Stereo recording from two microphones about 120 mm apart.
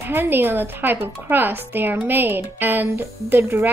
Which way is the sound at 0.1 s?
15° right (ahead or behind).